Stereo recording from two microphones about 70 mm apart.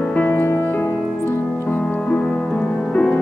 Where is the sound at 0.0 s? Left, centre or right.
Left.